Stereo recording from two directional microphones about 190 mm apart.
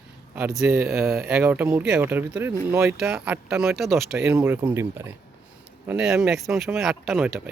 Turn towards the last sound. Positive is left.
turn(degrees=-5)  # may be behind; listen again after turning